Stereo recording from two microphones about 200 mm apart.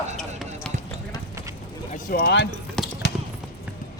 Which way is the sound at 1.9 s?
50° left (ahead or behind).